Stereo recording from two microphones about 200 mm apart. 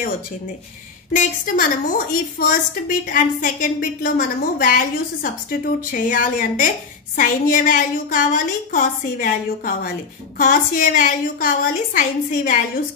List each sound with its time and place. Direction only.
1.1 s a woman's voice: 40° left (ahead or behind)